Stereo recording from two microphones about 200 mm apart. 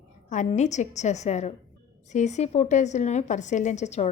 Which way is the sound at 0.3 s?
35° left (ahead or behind).